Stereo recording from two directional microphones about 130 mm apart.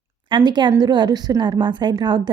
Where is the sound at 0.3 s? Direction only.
35° right (ahead or behind).